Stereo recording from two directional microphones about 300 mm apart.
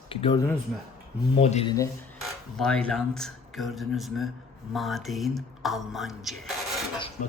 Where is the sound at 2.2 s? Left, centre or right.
Centre.